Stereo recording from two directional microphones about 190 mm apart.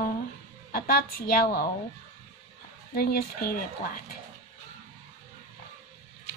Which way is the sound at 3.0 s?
55° left (ahead or behind).